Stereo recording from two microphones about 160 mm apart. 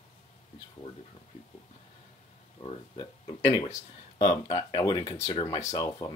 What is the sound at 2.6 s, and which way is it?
Speech, 35° left (ahead or behind).